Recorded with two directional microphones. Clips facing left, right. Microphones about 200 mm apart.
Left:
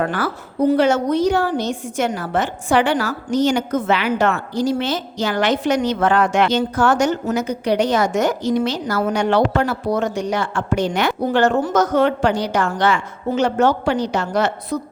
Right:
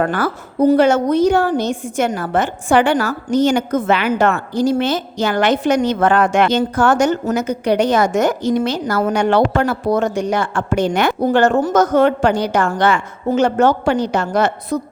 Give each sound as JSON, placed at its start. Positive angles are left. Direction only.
{"t": 0.0, "sound": "a woman's voice", "side_deg": -50}